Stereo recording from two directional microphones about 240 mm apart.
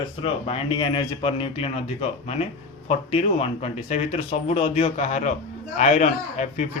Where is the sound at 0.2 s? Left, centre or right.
Left.